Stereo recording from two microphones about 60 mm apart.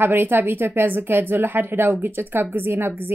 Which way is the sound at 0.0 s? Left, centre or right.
Right.